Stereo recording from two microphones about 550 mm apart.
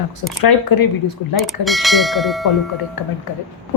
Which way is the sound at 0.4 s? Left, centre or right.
Left.